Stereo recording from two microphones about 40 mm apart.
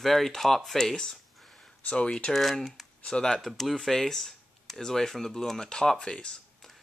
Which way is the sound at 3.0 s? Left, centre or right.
Centre.